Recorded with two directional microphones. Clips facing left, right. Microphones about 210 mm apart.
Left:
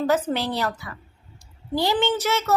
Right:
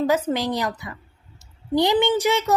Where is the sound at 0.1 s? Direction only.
10° right (ahead or behind).